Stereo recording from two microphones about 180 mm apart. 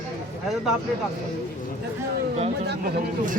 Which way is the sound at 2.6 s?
55° right (ahead or behind).